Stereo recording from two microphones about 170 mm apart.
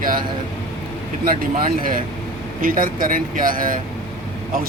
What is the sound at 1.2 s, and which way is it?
Speech, 55° right (ahead or behind).